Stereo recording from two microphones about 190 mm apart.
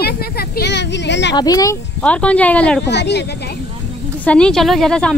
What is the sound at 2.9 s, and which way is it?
Speech, 65° left (ahead or behind).